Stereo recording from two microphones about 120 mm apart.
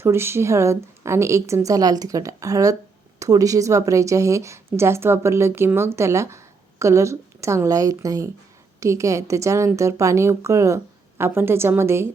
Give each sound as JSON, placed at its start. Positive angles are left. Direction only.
{"t": 0.0, "sound": "a woman's voice", "side_deg": -20}